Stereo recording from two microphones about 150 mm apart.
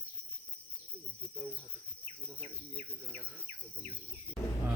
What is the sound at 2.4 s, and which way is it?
Insect, 40° right (ahead or behind).